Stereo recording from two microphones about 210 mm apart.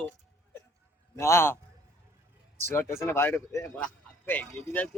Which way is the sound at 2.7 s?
10° left (ahead or behind).